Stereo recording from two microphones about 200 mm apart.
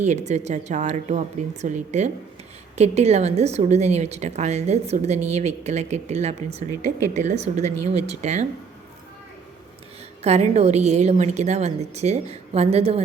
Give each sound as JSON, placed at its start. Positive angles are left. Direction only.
{"t": 0.0, "sound": "a woman's voice", "side_deg": -35}
{"t": 10.2, "sound": "a woman's voice", "side_deg": -35}